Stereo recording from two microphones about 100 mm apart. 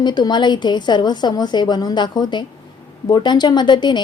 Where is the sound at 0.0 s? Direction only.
45° left (ahead or behind).